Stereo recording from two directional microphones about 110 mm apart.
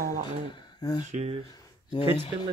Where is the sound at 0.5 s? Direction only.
40° left (ahead or behind).